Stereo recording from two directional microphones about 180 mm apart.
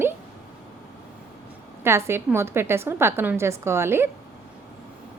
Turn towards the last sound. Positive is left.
turn(degrees=-15)  # may be behind; listen again after turning